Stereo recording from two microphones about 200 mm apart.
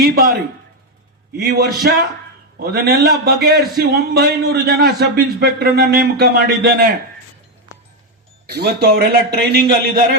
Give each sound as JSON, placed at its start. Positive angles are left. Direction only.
{"t": 1.4, "sound": "speech", "side_deg": -50}
{"t": 8.4, "sound": "speech", "side_deg": -55}